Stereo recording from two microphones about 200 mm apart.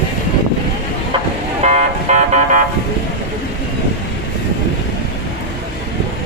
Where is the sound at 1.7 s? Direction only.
35° right (ahead or behind).